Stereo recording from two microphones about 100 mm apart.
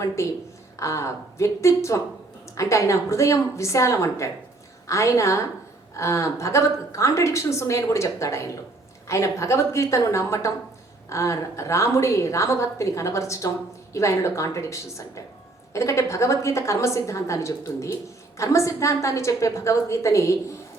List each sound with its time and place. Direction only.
0.2 s a woman's voice: 30° left (ahead or behind)